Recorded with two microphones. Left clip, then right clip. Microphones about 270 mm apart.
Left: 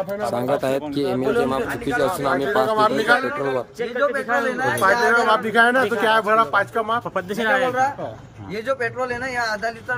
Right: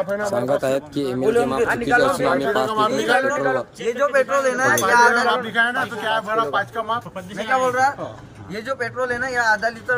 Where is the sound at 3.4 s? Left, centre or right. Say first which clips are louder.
Right 2 dB; right.